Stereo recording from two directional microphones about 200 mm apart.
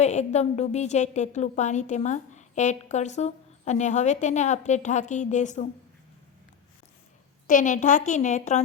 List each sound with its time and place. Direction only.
0.0 s a woman's voice: 35° left (ahead or behind)
7.4 s a woman's voice: 40° left (ahead or behind)